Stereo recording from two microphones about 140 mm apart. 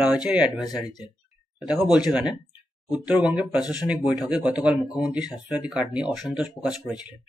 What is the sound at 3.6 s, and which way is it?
Speech, 30° left (ahead or behind).